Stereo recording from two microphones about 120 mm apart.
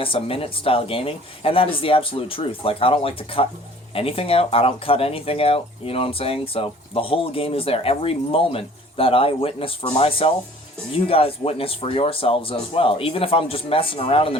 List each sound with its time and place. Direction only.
0.0 s speech: 50° left (ahead or behind)